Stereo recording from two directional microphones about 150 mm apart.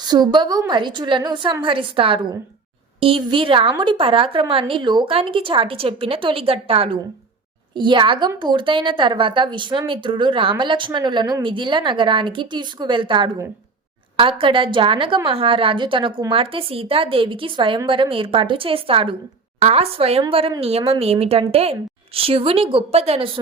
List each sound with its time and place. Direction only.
0.0 s a woman's voice: 30° right (ahead or behind)